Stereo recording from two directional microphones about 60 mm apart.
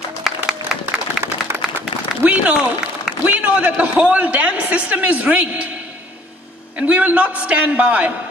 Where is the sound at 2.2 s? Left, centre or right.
Right.